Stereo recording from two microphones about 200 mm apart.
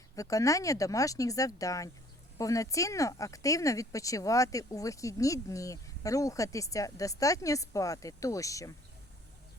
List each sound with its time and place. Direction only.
0.2 s speech: 15° left (ahead or behind)